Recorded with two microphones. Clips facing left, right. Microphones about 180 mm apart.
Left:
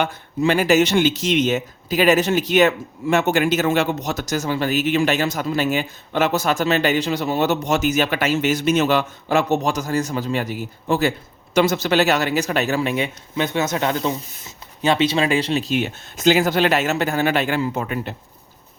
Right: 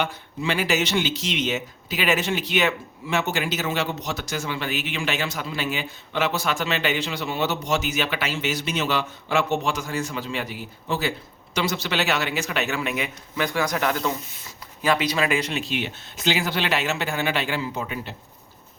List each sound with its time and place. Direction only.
0.0 s speech: 45° left (ahead or behind)